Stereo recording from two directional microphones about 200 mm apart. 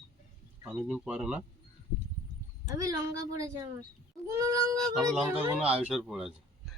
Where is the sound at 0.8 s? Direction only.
5° right (ahead or behind).